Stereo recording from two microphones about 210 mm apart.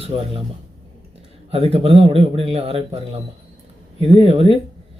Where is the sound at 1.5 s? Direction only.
25° right (ahead or behind).